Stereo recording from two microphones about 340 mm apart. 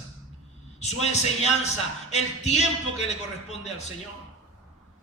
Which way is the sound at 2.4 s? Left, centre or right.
Centre.